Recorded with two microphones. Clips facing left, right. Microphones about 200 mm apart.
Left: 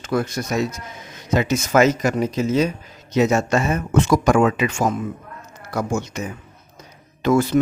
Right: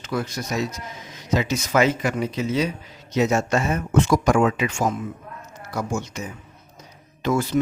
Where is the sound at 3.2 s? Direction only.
85° left.